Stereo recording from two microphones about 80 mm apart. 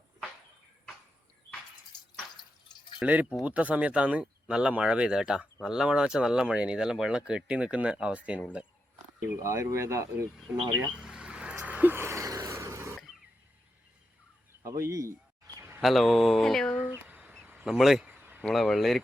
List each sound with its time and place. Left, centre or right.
3.0 s speech: centre
9.2 s speech: right
10.9 s vehicle: centre
11.6 s music: right
14.6 s speech: right
15.8 s speech: centre
16.9 s a sound: right
17.2 s a sound: centre
17.7 s speech: centre
18.1 s a sound: right
18.4 s speech: centre